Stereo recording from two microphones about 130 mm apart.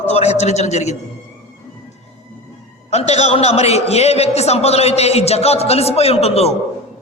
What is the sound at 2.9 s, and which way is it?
A man's voice, 55° left (ahead or behind).